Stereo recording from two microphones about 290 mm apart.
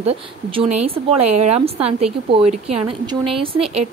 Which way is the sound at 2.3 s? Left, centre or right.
Right.